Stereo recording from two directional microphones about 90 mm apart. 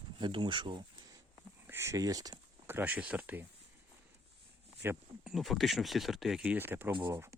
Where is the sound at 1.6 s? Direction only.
30° right (ahead or behind).